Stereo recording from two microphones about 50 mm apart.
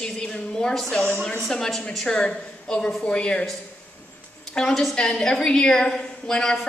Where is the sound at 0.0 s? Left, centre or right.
Centre.